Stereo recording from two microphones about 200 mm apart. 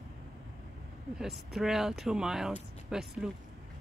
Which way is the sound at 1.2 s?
Centre (ahead or behind).